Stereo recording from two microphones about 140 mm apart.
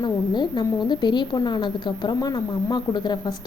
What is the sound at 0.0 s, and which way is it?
A woman's voice, 30° left (ahead or behind).